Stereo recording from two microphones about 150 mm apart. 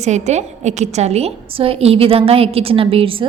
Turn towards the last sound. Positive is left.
turn(degrees=-35)  # may be behind; listen again after turning